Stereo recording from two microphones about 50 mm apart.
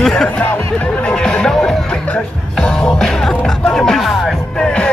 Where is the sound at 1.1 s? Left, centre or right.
Centre.